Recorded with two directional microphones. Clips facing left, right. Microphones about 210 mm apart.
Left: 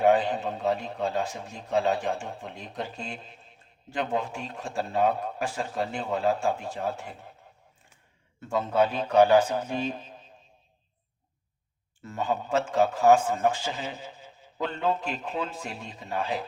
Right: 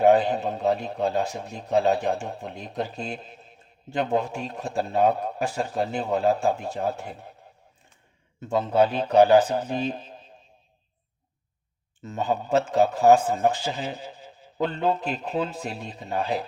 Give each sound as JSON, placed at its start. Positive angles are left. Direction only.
{"t": 0.0, "sound": "a man's voice", "side_deg": -40}
{"t": 4.4, "sound": "a man's voice", "side_deg": -40}
{"t": 8.5, "sound": "a man's voice", "side_deg": -30}
{"t": 12.2, "sound": "a man's voice", "side_deg": -35}